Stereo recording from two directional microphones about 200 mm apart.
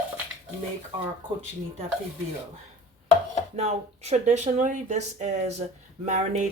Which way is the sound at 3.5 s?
30° right (ahead or behind).